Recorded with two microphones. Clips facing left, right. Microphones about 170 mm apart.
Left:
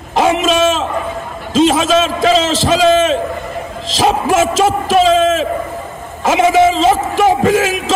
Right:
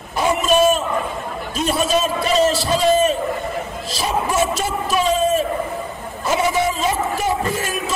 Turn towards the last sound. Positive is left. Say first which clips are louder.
# left 10 dB
turn(degrees=90)